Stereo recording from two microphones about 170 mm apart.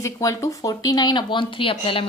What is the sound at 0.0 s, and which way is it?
A woman's voice, 20° left (ahead or behind).